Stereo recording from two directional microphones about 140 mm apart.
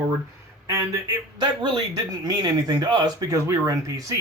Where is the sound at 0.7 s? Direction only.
25° right (ahead or behind).